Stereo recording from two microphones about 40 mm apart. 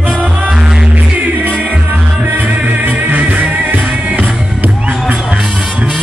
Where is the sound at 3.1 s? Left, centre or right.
Right.